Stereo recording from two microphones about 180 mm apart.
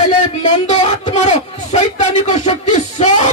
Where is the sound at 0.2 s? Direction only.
40° left (ahead or behind).